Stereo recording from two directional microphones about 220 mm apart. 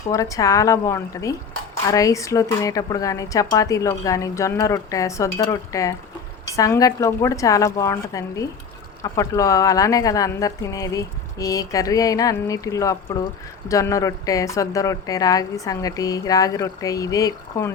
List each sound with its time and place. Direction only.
0.1 s speech: 15° left (ahead or behind)